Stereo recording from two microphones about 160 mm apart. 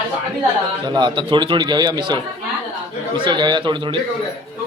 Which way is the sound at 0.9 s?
30° right (ahead or behind).